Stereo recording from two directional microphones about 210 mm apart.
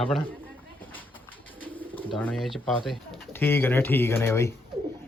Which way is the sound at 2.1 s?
Centre (ahead or behind).